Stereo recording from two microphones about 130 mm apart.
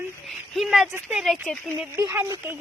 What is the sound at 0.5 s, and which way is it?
A woman's voice, centre (ahead or behind).